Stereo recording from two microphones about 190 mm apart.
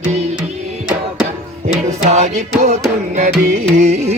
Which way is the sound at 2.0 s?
35° right (ahead or behind).